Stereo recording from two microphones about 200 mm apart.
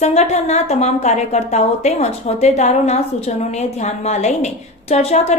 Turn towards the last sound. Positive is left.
turn(degrees=35)  # may be behind; listen again after turning